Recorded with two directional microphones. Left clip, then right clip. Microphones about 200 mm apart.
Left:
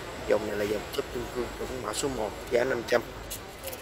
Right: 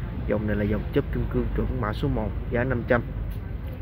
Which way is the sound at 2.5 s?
20° left (ahead or behind).